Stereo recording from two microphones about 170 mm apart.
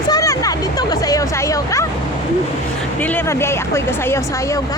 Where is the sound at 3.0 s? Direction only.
10° left (ahead or behind).